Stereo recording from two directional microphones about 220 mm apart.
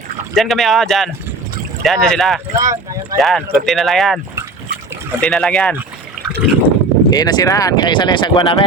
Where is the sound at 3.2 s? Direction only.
Centre (ahead or behind).